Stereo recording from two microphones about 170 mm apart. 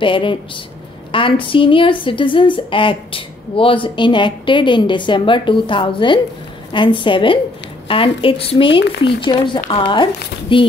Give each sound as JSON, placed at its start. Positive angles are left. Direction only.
{"t": 0.0, "sound": "a woman's voice", "side_deg": 30}